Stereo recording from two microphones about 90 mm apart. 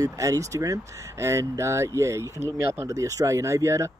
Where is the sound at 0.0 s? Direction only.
35° right (ahead or behind).